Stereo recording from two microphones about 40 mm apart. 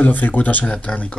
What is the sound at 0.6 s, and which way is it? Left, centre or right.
Speech, left.